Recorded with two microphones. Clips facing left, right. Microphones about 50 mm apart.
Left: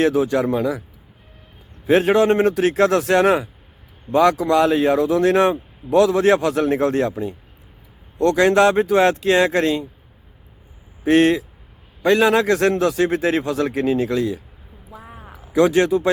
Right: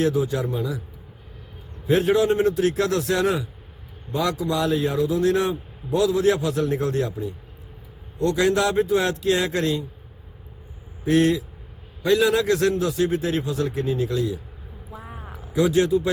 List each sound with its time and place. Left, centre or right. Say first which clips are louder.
0.0 s speech: left 5 dB; left
1.9 s a man's voice: left 4 dB; left
11.0 s a man's voice: left 4 dB; left
12.7 s speech: left 4 dB; left
14.8 s a sound: even; centre
15.5 s speech: left 4 dB; left